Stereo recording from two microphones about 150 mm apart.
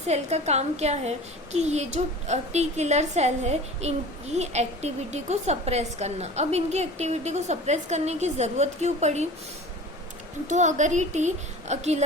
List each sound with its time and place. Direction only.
0.1 s a child's voice: 45° right (ahead or behind)
10.4 s a child's voice: 55° right (ahead or behind)